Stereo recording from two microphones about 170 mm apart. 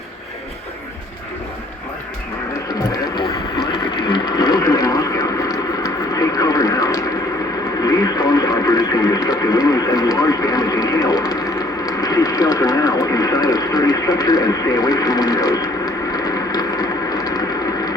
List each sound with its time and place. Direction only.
2.9 s radio: 20° left (ahead or behind)